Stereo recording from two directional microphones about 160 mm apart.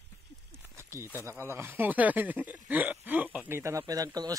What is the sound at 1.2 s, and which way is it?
Speech, 15° right (ahead or behind).